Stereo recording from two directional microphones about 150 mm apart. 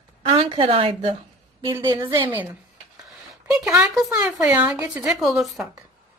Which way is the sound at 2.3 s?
10° right (ahead or behind).